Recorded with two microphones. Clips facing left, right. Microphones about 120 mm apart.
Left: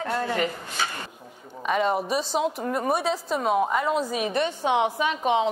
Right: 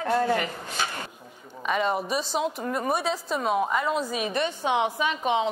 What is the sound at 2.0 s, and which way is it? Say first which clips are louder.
Speech: left 2 dB; 55° left (ahead or behind).